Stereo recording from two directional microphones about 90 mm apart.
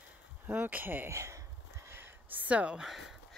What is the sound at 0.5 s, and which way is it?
Speech, 20° right (ahead or behind).